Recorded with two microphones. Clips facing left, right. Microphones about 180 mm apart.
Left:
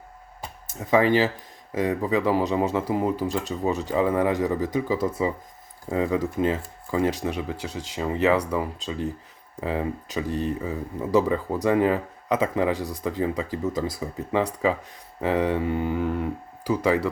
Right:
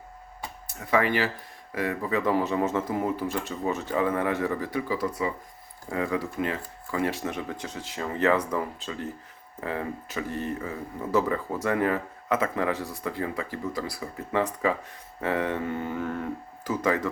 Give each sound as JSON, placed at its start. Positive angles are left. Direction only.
{"t": 0.7, "sound": "speech", "side_deg": 20}
{"t": 15.2, "sound": "speech", "side_deg": 15}